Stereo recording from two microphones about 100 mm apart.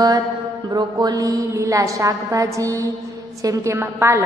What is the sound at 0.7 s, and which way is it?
A woman's voice, 45° right (ahead or behind).